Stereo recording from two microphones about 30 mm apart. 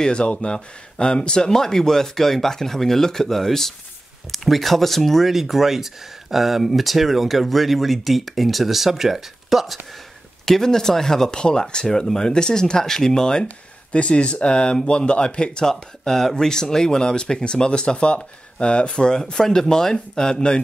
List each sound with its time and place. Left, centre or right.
0.0 s speech: left
1.5 s speech: centre
5.3 s speech: centre
10.4 s speech: centre
11.3 s speech: left
13.9 s speech: left
15.6 s speech: centre; by 19.3 s left
19.3 s speech: centre